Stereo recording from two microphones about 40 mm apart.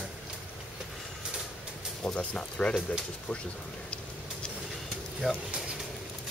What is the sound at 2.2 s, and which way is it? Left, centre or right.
Speech, left.